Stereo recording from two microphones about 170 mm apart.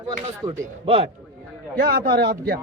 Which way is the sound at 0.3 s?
20° right (ahead or behind).